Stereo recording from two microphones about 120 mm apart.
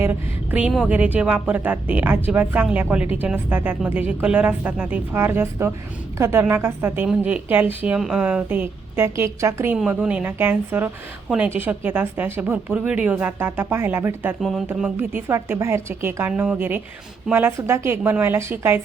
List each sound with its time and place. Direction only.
0.0 s a woman's voice: 15° right (ahead or behind)
9.7 s a woman's voice: 5° right (ahead or behind)